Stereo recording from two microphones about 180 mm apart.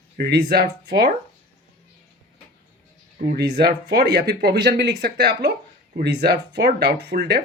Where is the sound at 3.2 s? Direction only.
55° right (ahead or behind).